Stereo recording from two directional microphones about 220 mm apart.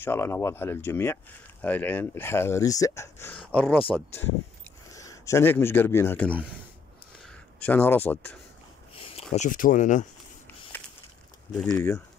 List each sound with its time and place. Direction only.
0.0 s speech: 10° left (ahead or behind)
4.9 s a man's voice: 15° left (ahead or behind)
7.6 s speech: 10° left (ahead or behind)
9.0 s speech: 30° left (ahead or behind)
11.6 s speech: 15° left (ahead or behind)